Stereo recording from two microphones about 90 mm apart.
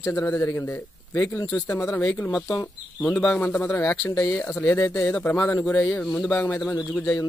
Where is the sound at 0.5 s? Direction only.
30° left (ahead or behind).